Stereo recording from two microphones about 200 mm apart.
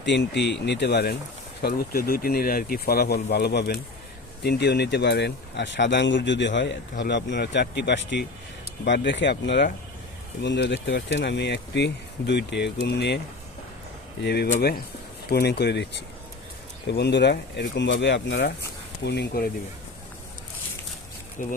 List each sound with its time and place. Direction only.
0.0 s speech: 60° left (ahead or behind)
14.2 s speech: 55° left (ahead or behind)
21.4 s speech: 40° left (ahead or behind)